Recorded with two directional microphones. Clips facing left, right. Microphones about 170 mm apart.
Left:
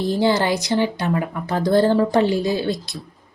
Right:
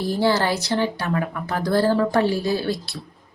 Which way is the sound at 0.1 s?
15° left (ahead or behind).